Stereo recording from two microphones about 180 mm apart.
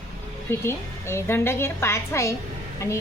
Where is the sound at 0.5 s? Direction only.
15° left (ahead or behind).